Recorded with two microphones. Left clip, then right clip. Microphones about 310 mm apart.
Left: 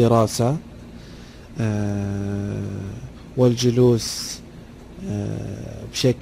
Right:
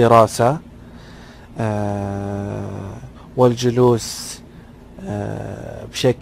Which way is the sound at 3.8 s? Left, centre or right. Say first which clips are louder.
Right 4 dB; right.